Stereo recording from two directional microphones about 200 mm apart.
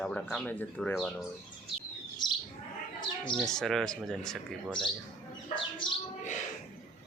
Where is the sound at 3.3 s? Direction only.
Centre (ahead or behind).